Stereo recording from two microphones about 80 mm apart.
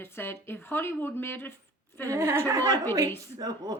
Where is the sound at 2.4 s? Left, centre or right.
Right.